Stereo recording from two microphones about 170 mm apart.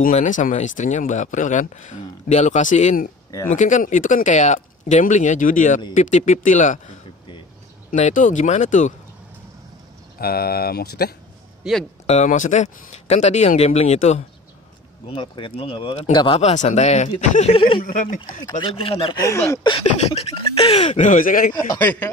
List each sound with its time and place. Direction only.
0.1 s speech: 45° left (ahead or behind)
7.9 s speech: 50° left (ahead or behind)
10.1 s speech: 65° left (ahead or behind)
11.6 s speech: centre (ahead or behind)
12.1 s speech: 45° left (ahead or behind)
15.0 s speech: 30° left (ahead or behind)
19.2 s speech: 15° left (ahead or behind)
19.6 s speech: 35° left (ahead or behind); by 21.5 s 55° left (ahead or behind)
21.7 s speech: 10° left (ahead or behind)